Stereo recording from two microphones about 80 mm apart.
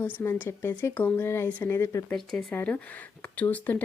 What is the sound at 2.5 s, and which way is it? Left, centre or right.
Speech, left.